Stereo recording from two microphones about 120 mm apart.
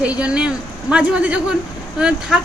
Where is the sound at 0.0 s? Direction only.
10° right (ahead or behind).